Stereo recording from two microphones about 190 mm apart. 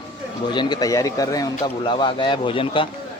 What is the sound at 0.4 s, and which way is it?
Speech, 25° left (ahead or behind).